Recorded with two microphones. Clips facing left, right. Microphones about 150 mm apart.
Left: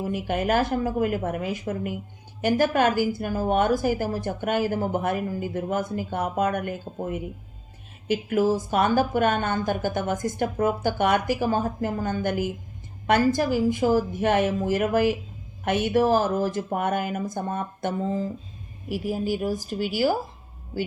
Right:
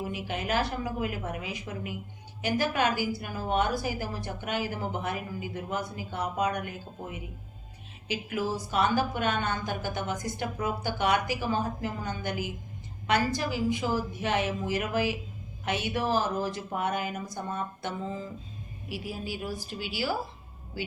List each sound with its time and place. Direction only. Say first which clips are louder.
0.1 s a woman's voice: left 10 dB; 50° left (ahead or behind)